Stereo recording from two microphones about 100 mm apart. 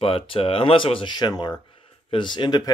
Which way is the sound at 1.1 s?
45° left (ahead or behind).